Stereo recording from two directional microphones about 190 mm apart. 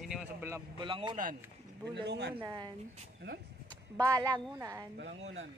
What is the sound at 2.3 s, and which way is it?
Speech, 20° right (ahead or behind).